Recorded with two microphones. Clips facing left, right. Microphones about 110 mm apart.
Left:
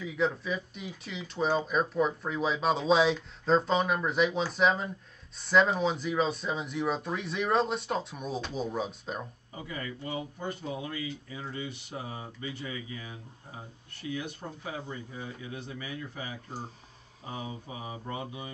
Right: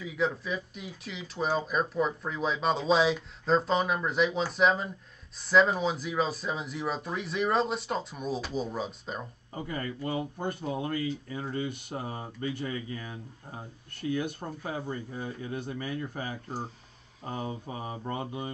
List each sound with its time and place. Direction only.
0.0 s speech: centre (ahead or behind)
9.5 s speech: 45° right (ahead or behind)